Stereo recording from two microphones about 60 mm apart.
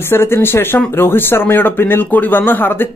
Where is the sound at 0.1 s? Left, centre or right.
Left.